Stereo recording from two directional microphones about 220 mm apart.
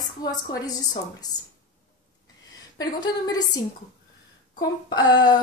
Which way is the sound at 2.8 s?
15° left (ahead or behind).